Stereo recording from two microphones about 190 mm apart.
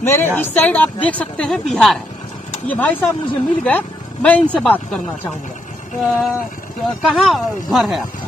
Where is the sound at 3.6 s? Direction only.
5° left (ahead or behind).